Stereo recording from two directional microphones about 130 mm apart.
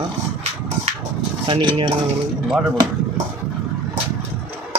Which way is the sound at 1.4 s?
40° right (ahead or behind).